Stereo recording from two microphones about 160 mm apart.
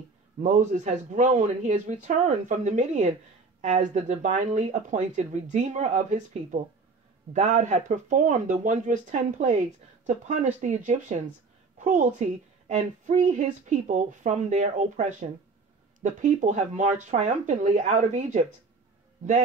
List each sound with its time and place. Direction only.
0.4 s speech: 50° right (ahead or behind)